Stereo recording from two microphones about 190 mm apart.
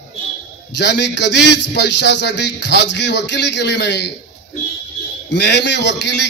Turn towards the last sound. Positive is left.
turn(degrees=65)  # may be behind; listen again after turning